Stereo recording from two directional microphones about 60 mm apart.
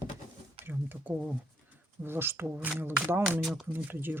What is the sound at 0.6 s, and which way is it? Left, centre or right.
Speech, right.